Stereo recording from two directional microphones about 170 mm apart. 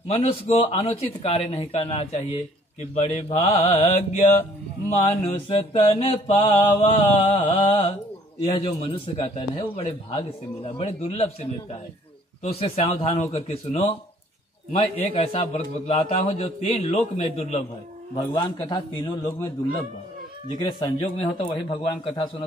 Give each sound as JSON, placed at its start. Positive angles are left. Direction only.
{"t": 0.1, "sound": "a man's voice", "side_deg": 35}
{"t": 15.1, "sound": "a man's voice", "side_deg": 35}
{"t": 18.1, "sound": "a man's voice", "side_deg": 25}
{"t": 20.5, "sound": "a man's voice", "side_deg": 25}